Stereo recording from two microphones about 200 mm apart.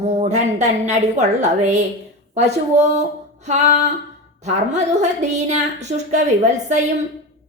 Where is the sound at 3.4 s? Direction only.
35° right (ahead or behind).